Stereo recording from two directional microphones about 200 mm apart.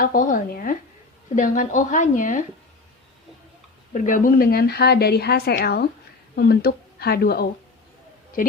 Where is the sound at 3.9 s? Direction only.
40° left (ahead or behind).